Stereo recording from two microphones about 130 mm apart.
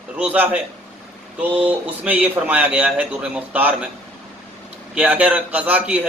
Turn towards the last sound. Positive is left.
turn(degrees=-10)  # may be behind; listen again after turning